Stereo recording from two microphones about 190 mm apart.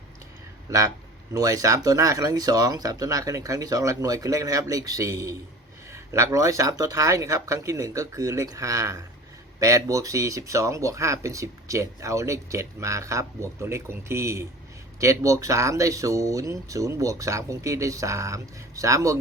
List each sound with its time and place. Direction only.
0.7 s speech: 15° right (ahead or behind)